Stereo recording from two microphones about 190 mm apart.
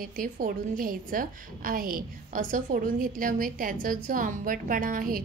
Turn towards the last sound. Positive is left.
turn(degrees=-45)  # may be behind; listen again after turning